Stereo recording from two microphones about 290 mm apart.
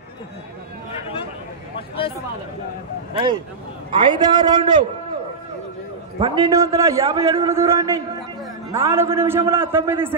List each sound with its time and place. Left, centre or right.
1.8 s speech: centre
3.9 s a man's voice: centre
6.1 s a man's voice: centre